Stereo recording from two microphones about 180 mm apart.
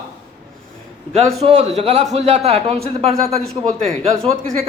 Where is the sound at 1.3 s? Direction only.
40° right (ahead or behind).